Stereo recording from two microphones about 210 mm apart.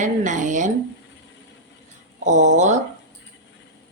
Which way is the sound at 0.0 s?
35° right (ahead or behind).